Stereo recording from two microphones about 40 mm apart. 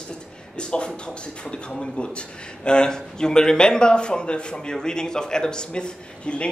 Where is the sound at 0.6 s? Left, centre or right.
Left.